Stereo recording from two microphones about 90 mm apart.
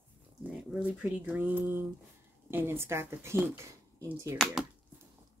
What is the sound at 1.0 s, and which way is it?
Speech, 15° right (ahead or behind).